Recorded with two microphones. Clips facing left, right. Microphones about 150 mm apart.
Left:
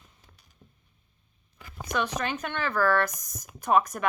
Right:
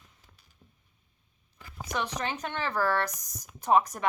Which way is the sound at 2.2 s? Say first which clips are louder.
Left 2 dB; 30° right (ahead or behind).